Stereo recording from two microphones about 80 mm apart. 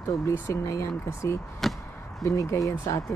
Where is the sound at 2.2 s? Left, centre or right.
Left.